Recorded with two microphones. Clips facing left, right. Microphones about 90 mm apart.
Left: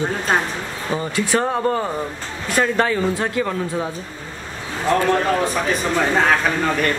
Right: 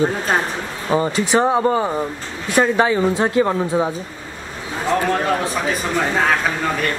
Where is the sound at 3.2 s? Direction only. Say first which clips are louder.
Right 5 dB; 25° right (ahead or behind).